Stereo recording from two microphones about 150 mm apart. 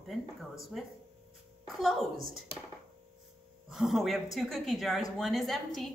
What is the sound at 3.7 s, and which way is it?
A woman's voice, centre (ahead or behind).